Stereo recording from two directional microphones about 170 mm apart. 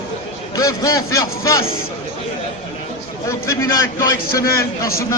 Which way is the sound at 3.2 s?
15° left (ahead or behind).